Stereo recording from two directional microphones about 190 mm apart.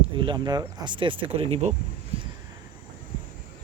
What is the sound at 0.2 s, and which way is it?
Speech, 25° right (ahead or behind).